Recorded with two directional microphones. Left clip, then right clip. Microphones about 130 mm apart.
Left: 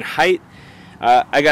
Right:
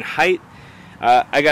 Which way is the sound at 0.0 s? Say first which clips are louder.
Left 1 dB; 10° left (ahead or behind).